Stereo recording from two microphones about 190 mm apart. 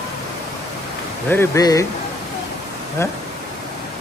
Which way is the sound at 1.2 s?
10° left (ahead or behind).